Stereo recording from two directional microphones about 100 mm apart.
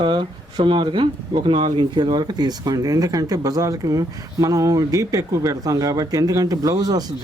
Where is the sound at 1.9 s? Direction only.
50° right (ahead or behind).